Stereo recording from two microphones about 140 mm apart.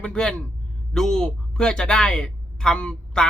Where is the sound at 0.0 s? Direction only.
5° left (ahead or behind).